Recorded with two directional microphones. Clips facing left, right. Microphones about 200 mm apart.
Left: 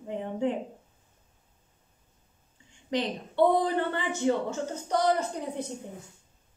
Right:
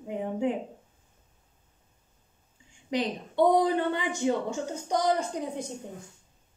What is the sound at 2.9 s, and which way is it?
Speech, 10° right (ahead or behind).